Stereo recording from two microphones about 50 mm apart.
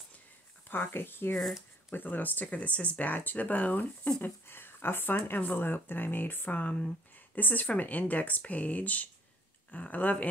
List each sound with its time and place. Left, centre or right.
0.7 s speech: left
4.2 s speech: left